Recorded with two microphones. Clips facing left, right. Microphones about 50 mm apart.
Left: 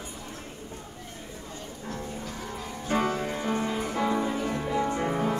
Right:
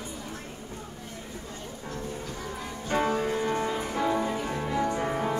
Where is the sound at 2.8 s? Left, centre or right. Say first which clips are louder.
Right 1 dB; centre.